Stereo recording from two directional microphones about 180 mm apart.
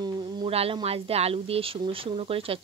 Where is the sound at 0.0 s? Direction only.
25° right (ahead or behind).